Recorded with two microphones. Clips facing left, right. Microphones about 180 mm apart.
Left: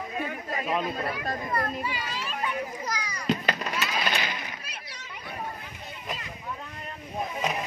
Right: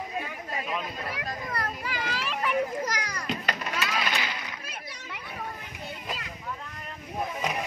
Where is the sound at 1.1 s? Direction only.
90° right.